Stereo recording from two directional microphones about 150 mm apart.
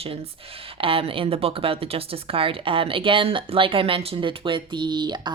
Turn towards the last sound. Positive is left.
turn(degrees=-30)  # may be behind; listen again after turning